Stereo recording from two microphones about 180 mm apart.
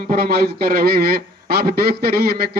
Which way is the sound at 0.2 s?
60° right (ahead or behind).